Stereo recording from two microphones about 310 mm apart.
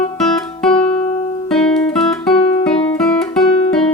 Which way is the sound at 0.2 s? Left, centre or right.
Centre.